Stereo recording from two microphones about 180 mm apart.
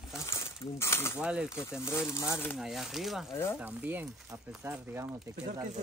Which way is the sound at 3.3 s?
15° left (ahead or behind).